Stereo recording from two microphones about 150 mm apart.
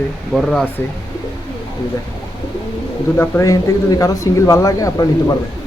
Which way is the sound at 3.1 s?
15° left (ahead or behind).